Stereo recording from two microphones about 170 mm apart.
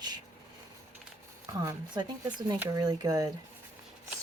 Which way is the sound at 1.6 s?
20° right (ahead or behind).